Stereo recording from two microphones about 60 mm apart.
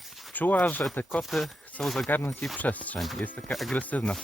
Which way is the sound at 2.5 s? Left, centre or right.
Left.